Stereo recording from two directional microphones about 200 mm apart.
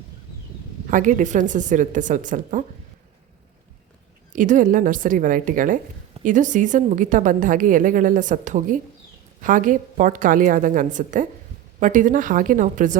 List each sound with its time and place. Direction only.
0.9 s a woman's voice: 40° right (ahead or behind)
4.3 s a woman's voice: 40° right (ahead or behind)